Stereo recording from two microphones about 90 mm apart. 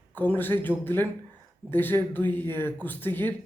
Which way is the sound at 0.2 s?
20° left (ahead or behind).